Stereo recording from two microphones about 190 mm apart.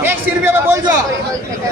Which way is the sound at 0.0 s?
10° right (ahead or behind).